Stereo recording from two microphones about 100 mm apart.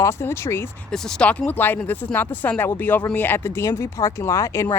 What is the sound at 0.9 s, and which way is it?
Speech, 5° left (ahead or behind).